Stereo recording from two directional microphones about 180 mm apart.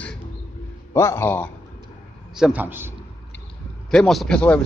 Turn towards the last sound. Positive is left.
turn(degrees=5)  # may be behind; listen again after turning